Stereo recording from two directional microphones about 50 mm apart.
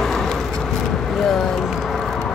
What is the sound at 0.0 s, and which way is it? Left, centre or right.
Vehicle, centre.